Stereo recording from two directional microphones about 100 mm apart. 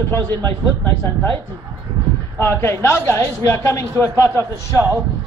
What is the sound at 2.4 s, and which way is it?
A man's voice, 25° left (ahead or behind).